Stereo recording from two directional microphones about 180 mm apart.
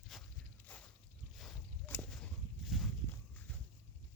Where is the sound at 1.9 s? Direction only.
10° left (ahead or behind).